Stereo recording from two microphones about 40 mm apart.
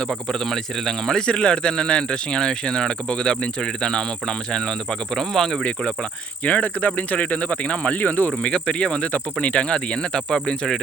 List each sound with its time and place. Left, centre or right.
0.3 s insect: centre
1.3 s speech: left
5.1 s insect: centre
6.4 s speech: left
7.9 s speech: left
8.4 s speech: left
10.2 s insect: centre